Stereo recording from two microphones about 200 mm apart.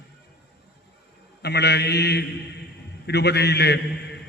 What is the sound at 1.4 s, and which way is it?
A man's voice, 55° left (ahead or behind).